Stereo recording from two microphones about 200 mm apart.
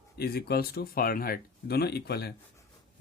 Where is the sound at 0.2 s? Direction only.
50° left (ahead or behind).